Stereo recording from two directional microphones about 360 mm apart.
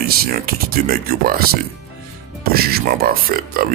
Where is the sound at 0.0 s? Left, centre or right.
Right.